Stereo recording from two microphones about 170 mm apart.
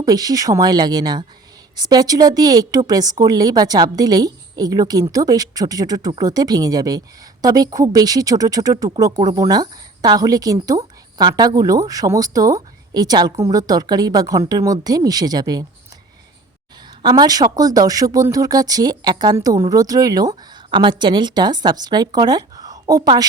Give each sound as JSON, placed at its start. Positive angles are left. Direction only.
{"t": 0.0, "sound": "speech", "side_deg": -20}
{"t": 17.0, "sound": "speech", "side_deg": -25}